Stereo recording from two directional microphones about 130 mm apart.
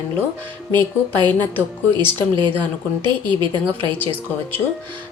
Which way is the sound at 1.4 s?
15° left (ahead or behind).